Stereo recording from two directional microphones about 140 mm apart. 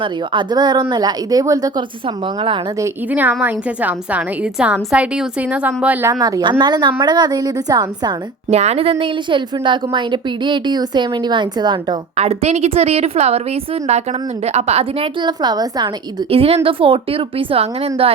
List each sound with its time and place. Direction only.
0.0 s a woman's voice: 35° right (ahead or behind)
3.1 s a woman's voice: 10° right (ahead or behind)
6.1 s a woman's voice: 25° right (ahead or behind)
8.4 s a woman's voice: 50° right (ahead or behind); by 11.9 s 30° right (ahead or behind)
12.1 s a woman's voice: 50° right (ahead or behind); by 15.9 s 30° right (ahead or behind)
16.3 s a woman's voice: 45° right (ahead or behind)